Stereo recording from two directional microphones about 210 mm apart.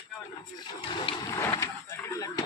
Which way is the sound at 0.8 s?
20° left (ahead or behind).